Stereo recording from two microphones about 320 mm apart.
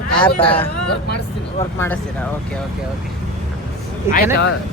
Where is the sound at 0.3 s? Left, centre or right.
Centre.